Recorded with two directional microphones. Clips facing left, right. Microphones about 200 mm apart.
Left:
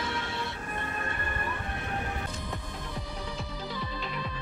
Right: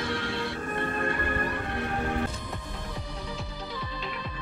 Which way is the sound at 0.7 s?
45° right (ahead or behind).